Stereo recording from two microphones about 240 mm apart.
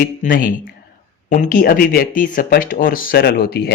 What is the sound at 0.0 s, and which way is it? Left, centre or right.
Speech, left.